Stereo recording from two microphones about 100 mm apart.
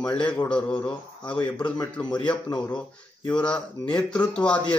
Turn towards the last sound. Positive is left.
turn(degrees=10)  # may be behind; listen again after turning